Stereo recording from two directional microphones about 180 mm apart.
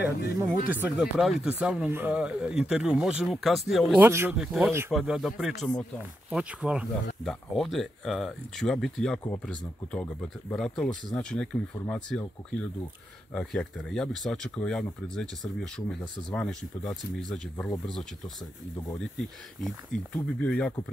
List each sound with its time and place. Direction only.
0.2 s speech: 60° left (ahead or behind)
0.7 s speech: 10° right (ahead or behind)
4.0 s speech: 10° right (ahead or behind); by 17.6 s 5° left (ahead or behind)
18.9 s speech: centre (ahead or behind)